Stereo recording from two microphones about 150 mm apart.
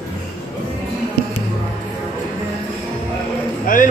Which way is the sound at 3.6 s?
65° left (ahead or behind).